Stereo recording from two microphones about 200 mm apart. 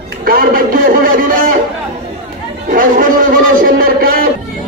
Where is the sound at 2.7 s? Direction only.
45° right (ahead or behind).